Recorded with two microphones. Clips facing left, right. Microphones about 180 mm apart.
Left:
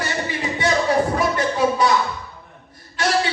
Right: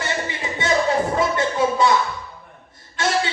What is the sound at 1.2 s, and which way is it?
Music, 25° right (ahead or behind).